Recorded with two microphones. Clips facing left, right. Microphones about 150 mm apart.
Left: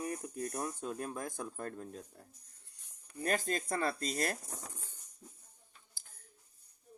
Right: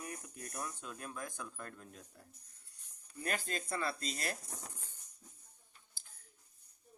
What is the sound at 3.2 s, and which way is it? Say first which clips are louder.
Speech: left 5 dB; 40° left (ahead or behind).